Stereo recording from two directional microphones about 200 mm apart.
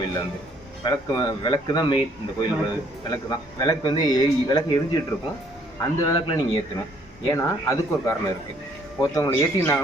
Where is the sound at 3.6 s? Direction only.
20° left (ahead or behind).